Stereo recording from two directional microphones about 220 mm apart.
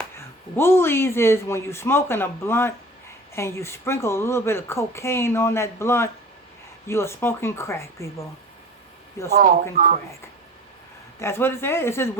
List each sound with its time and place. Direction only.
0.0 s speech: 10° left (ahead or behind)
9.3 s speech: 40° right (ahead or behind)
11.2 s speech: 10° left (ahead or behind)